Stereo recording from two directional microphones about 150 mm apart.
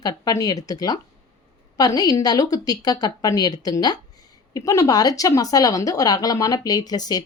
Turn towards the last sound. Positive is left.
turn(degrees=25)  # may be behind; listen again after turning